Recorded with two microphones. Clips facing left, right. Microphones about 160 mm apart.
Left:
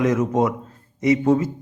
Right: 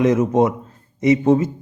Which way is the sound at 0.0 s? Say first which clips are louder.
Right 3 dB; 20° right (ahead or behind).